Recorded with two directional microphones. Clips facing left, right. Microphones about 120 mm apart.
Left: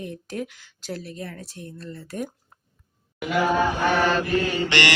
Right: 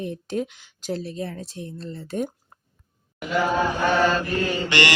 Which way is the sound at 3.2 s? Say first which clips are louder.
Left 1 dB; 15° left (ahead or behind).